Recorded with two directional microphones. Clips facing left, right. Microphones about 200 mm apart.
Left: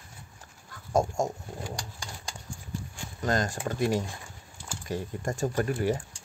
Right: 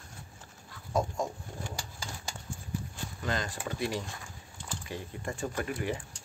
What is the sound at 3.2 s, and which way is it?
Speech, 45° left (ahead or behind).